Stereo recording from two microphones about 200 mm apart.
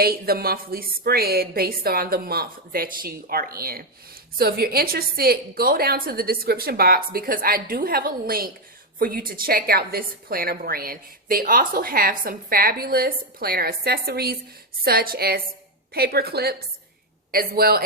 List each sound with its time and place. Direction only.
0.0 s a woman's voice: 50° right (ahead or behind)